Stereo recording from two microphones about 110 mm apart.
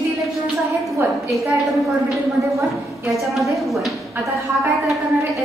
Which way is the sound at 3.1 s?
Centre (ahead or behind).